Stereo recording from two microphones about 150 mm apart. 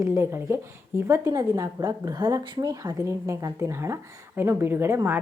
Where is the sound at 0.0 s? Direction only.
15° right (ahead or behind).